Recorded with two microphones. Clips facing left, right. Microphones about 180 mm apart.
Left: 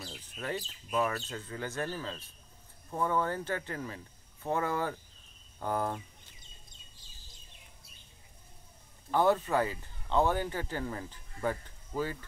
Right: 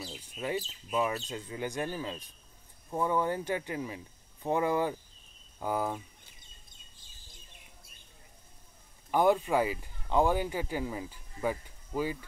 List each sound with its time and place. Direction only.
0.0 s chicken: centre (ahead or behind)
0.6 s speech: centre (ahead or behind)
1.3 s speech: 15° right (ahead or behind)
9.1 s speech: 15° right (ahead or behind)